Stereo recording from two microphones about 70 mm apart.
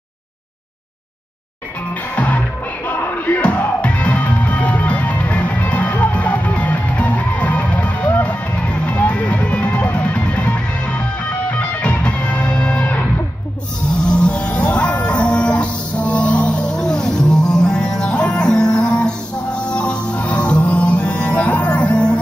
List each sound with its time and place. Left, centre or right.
2.1 s music: left
14.0 s music: centre